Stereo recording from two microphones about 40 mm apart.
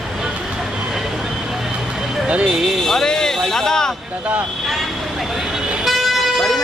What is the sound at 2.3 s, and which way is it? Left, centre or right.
Speech, right.